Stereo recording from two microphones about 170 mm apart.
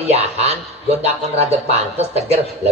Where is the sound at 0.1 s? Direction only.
40° right (ahead or behind).